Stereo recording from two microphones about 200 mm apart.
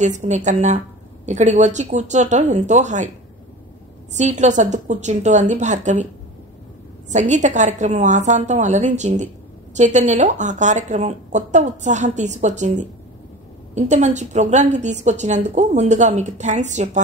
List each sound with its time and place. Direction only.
0.2 s a woman's voice: 35° right (ahead or behind)
4.1 s a woman's voice: 35° right (ahead or behind)
7.1 s a woman's voice: 35° right (ahead or behind)